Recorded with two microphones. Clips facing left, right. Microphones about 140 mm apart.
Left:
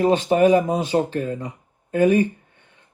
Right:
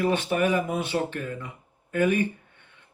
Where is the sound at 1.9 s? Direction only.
40° left (ahead or behind).